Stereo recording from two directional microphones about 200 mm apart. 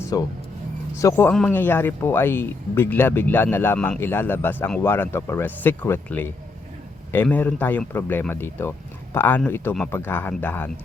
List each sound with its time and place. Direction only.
0.1 s speech: 20° left (ahead or behind)